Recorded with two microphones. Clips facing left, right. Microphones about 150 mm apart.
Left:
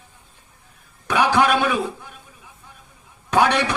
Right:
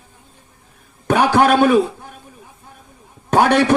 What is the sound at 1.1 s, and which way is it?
Speech, 45° right (ahead or behind).